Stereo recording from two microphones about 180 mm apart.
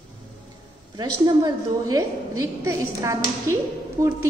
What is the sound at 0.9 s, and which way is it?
A woman's voice, 20° right (ahead or behind).